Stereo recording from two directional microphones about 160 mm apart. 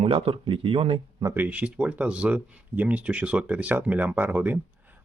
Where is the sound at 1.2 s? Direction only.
15° right (ahead or behind).